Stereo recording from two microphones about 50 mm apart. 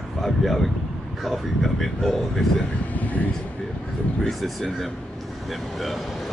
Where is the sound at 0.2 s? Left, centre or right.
Centre.